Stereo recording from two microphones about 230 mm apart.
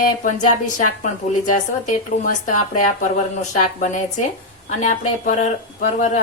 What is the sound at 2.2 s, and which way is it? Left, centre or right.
Speech, left.